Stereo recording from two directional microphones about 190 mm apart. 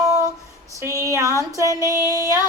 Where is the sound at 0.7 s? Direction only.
15° right (ahead or behind).